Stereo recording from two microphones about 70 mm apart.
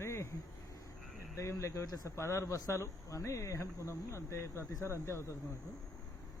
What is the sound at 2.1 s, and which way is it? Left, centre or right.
Speech, left.